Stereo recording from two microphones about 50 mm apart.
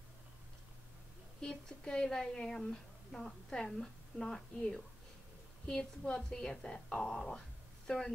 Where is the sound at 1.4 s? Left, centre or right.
Centre.